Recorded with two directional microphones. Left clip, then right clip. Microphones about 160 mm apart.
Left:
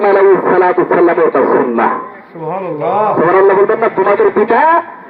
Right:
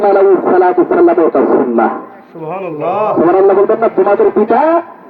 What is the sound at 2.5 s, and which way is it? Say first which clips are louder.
Speech: left 1 dB; centre (ahead or behind).